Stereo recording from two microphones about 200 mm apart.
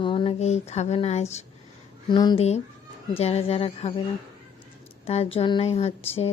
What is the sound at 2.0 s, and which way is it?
Speech, 20° left (ahead or behind).